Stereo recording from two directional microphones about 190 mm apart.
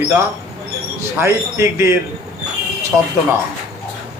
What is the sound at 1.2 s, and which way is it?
Speech, 15° right (ahead or behind).